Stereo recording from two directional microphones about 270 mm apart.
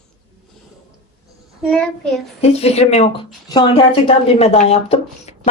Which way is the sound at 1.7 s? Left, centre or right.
Centre.